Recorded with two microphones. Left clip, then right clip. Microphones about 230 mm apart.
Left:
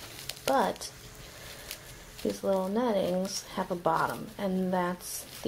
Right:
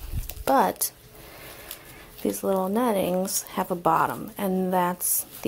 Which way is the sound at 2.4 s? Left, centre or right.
Right.